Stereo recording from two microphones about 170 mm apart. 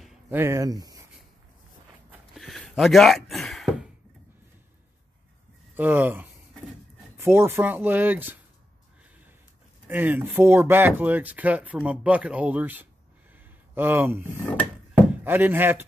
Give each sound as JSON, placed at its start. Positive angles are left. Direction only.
{"t": 0.3, "sound": "speech", "side_deg": -15}
{"t": 2.3, "sound": "a sound", "side_deg": 0}
{"t": 5.8, "sound": "speech", "side_deg": -10}
{"t": 9.8, "sound": "speech", "side_deg": -10}
{"t": 14.3, "sound": "speech", "side_deg": 15}
{"t": 15.2, "sound": "speech", "side_deg": -10}